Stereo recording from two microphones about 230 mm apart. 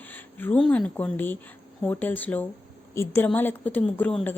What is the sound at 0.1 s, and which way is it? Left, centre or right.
Speech, centre.